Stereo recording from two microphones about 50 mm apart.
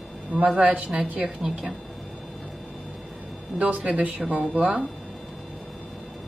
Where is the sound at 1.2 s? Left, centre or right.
Centre.